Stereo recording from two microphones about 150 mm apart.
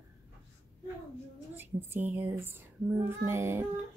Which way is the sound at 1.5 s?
15° right (ahead or behind).